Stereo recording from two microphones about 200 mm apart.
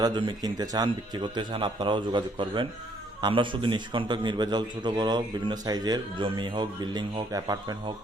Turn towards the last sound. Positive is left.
turn(degrees=-20)  # may be behind; listen again after turning